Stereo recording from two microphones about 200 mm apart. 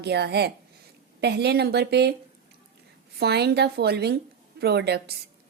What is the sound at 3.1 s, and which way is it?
A woman's voice, 55° right (ahead or behind).